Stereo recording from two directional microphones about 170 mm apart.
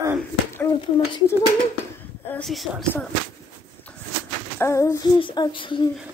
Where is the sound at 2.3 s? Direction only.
5° left (ahead or behind).